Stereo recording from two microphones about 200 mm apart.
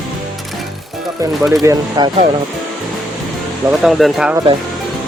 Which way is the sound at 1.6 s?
20° right (ahead or behind).